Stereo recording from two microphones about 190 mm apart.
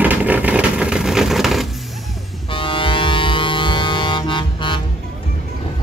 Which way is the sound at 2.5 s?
25° left (ahead or behind).